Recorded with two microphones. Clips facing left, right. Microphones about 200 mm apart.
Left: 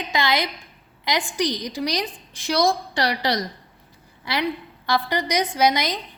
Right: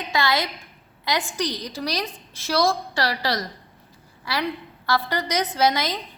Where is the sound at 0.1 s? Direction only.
15° left (ahead or behind).